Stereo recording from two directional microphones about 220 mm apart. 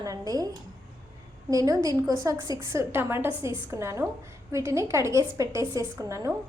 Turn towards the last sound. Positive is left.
turn(degrees=-15)  # may be behind; listen again after turning